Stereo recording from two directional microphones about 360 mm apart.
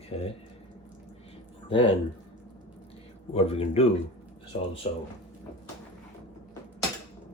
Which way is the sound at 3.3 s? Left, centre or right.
Centre.